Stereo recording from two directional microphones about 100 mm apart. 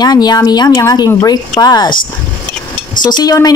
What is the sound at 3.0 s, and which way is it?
Speech, 40° left (ahead or behind).